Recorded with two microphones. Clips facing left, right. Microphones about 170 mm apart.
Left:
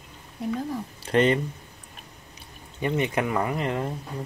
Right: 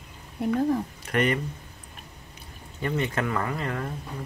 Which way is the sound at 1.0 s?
25° left (ahead or behind).